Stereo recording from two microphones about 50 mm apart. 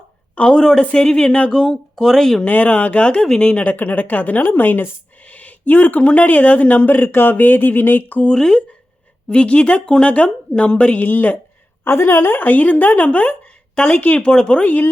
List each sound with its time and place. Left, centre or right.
0.3 s speech: centre
2.4 s speech: left
3.6 s speech: left
5.3 s speech: left
8.2 s speech: centre
11.0 s speech: left
11.9 s a woman's voice: left; by 14.6 s centre
14.6 s speech: left